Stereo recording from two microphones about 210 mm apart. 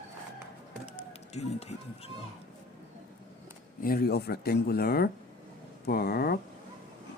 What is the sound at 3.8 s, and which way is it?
Speech, 45° left (ahead or behind).